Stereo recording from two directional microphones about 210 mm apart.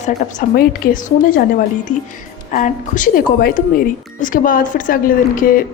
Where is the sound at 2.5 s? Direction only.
35° left (ahead or behind).